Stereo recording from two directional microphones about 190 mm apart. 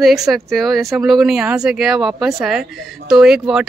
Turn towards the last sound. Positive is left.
turn(degrees=-5)  # may be behind; listen again after turning